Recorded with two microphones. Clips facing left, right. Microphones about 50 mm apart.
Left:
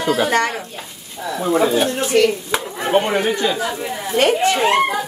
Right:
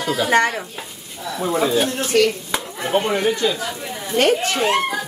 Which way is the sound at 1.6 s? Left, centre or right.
Centre.